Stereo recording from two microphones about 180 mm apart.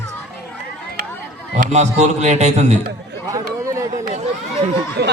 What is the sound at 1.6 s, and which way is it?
A man's voice, 40° right (ahead or behind).